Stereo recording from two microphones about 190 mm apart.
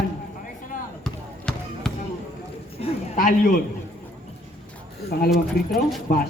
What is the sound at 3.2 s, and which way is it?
Speech, 50° left (ahead or behind).